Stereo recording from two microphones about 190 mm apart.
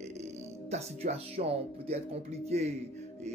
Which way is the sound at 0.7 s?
35° right (ahead or behind).